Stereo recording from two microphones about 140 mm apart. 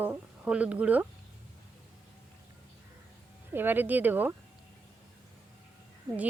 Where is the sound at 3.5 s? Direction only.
15° right (ahead or behind).